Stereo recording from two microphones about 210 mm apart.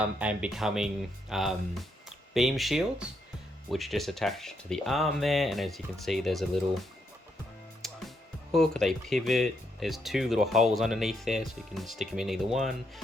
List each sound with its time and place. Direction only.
0.0 s speech: 5° right (ahead or behind)
7.8 s music: centre (ahead or behind)
8.5 s speech: centre (ahead or behind)